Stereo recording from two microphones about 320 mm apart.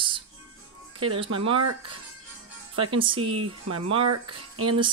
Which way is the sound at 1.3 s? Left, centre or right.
Centre.